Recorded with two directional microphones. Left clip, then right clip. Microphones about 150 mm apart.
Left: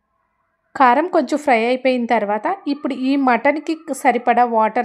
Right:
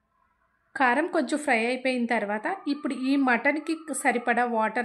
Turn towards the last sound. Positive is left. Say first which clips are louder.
# left 10 dB
turn(degrees=40)  # may be behind; listen again after turning